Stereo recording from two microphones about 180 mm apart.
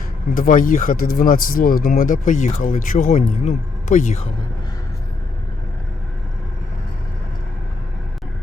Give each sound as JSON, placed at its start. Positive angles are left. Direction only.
{"t": 0.3, "sound": "speech", "side_deg": 50}